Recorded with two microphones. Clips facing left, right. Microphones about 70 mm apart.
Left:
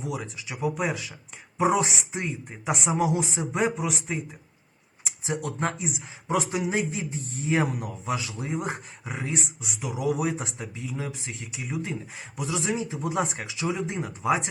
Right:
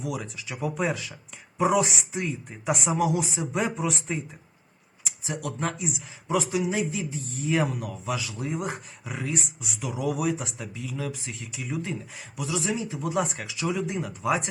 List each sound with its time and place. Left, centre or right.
0.0 s speech: left
0.5 s speech: centre
1.5 s speech: left
3.8 s speech: centre
5.0 s speech: left; by 10.2 s centre
10.2 s speech: left; by 11.9 s centre
12.1 s speech: left